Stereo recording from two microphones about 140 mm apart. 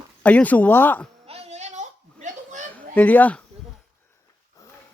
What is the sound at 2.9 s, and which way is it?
Speech, 10° left (ahead or behind).